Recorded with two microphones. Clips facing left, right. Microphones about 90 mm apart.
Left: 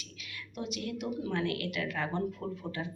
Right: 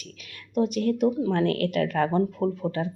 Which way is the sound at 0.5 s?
45° right (ahead or behind).